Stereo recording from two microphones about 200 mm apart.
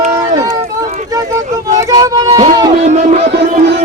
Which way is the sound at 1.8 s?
15° right (ahead or behind).